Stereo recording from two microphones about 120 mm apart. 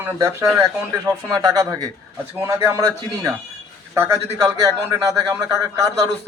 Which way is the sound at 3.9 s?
20° right (ahead or behind).